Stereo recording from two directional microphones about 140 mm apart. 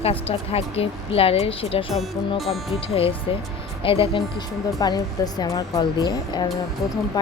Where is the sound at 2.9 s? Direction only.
45° left (ahead or behind).